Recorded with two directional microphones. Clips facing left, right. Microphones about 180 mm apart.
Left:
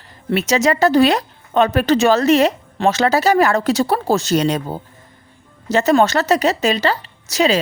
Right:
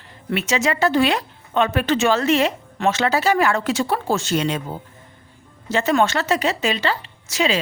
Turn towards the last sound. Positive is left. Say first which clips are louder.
# left 5 dB
turn(degrees=40)  # may be behind; listen again after turning